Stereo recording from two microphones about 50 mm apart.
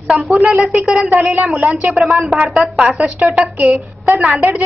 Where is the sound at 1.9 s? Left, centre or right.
Centre.